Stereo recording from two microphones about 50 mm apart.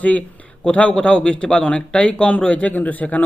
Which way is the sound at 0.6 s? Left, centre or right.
Left.